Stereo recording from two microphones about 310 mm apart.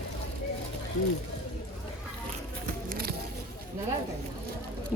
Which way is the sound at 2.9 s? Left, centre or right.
Right.